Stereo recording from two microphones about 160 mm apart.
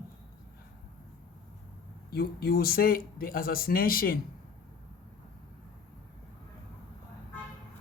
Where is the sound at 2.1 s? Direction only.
75° left (ahead or behind).